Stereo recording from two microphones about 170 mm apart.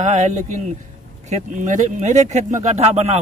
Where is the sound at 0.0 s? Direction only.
45° right (ahead or behind).